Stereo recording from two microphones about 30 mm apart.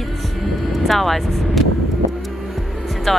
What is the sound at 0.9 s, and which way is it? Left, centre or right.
Speech, centre.